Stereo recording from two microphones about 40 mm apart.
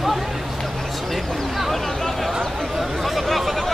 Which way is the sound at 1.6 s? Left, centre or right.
Centre.